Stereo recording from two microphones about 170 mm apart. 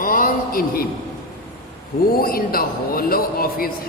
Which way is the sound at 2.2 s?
60° left (ahead or behind).